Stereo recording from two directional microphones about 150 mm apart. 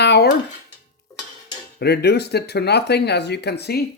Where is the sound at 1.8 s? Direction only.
90° left.